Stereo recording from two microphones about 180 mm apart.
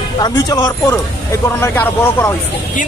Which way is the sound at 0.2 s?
20° left (ahead or behind).